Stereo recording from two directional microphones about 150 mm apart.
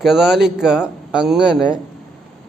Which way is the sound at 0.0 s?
5° right (ahead or behind).